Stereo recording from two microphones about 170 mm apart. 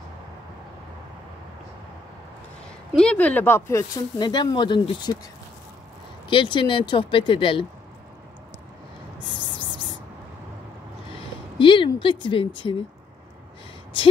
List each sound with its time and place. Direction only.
2.9 s speech: 5° left (ahead or behind); by 5.2 s 25° left (ahead or behind)
6.2 s speech: 30° left (ahead or behind)
9.4 s rub: 25° right (ahead or behind)
11.5 s a sound: 30° left (ahead or behind)